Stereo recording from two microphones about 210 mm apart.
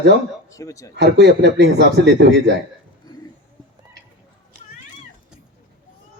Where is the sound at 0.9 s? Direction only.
55° right (ahead or behind).